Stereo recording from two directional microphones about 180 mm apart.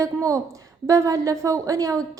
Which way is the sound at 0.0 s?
20° right (ahead or behind).